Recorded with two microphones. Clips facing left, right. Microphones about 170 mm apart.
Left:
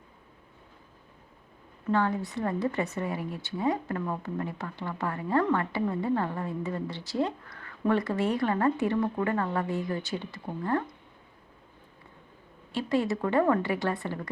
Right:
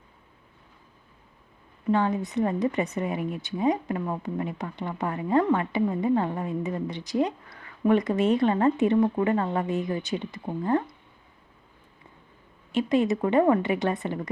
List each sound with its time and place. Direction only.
1.9 s a woman's voice: 15° right (ahead or behind)
12.7 s a woman's voice: 20° right (ahead or behind)